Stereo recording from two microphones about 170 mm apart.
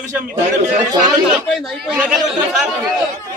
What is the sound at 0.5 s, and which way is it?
Speech, 45° right (ahead or behind).